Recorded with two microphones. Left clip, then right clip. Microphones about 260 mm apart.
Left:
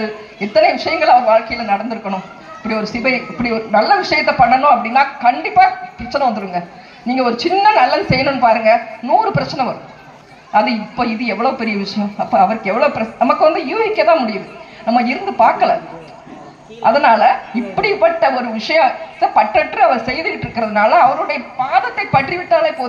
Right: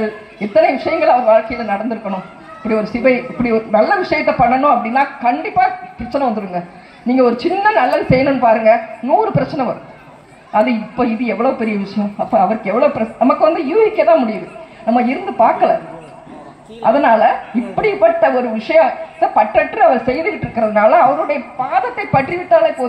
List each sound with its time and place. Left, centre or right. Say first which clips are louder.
0.4 s a man's voice: even; left
16.8 s a man's voice: left 1 dB; left
22.5 s a man's voice: right 3 dB; left